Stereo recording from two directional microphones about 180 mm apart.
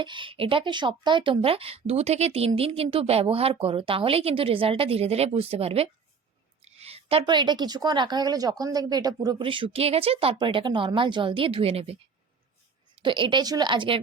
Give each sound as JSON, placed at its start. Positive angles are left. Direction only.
{"t": 0.0, "sound": "a woman's voice", "side_deg": -25}
{"t": 13.0, "sound": "a woman's voice", "side_deg": -30}